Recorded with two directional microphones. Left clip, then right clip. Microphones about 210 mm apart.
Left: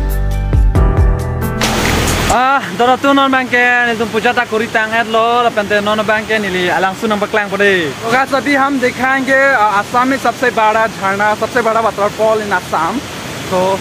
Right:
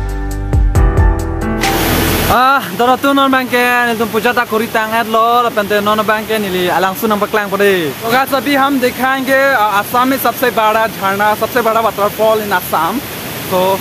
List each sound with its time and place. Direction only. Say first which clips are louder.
2.3 s speech: right 2 dB; 15° right (ahead or behind)
8.1 s speech: even; 5° right (ahead or behind)